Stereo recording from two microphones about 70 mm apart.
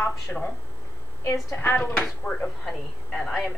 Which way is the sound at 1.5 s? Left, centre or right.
Left.